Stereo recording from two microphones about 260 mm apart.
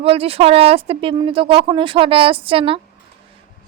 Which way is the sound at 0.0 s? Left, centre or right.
Right.